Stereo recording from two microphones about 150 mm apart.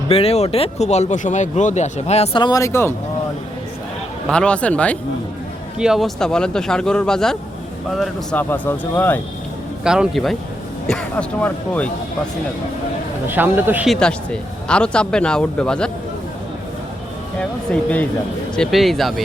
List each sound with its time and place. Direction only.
0.1 s speech: 40° left (ahead or behind)
2.4 s speech: 25° left (ahead or behind)
4.3 s speech: 5° left (ahead or behind)
5.7 s speech: 5° right (ahead or behind)
8.4 s speech: 10° left (ahead or behind)
9.8 s speech: 5° right (ahead or behind)
13.2 s a man's voice: 15° right (ahead or behind)
13.8 s speech: 5° left (ahead or behind)
17.3 s speech: 10° left (ahead or behind)